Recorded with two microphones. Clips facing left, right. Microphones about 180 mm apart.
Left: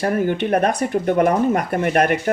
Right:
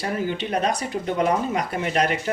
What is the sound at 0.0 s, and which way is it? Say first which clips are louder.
Speech: left 7 dB; 55° left (ahead or behind).